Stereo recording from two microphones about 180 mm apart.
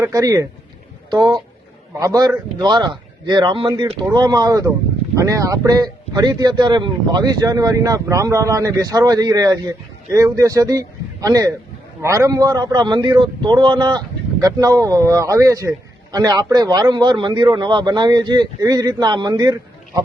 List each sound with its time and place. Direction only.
0.0 s a man's voice: 20° right (ahead or behind)